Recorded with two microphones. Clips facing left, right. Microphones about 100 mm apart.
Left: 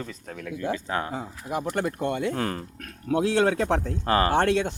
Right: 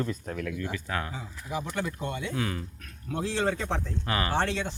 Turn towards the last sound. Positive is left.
turn(degrees=55)  # may be behind; listen again after turning